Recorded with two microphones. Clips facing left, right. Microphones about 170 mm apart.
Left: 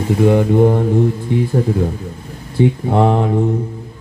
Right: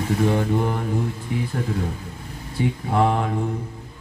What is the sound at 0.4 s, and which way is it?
Mantra, 25° left (ahead or behind).